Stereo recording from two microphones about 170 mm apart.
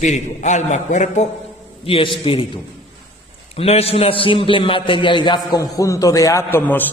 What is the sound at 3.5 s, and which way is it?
A man's voice, 35° left (ahead or behind).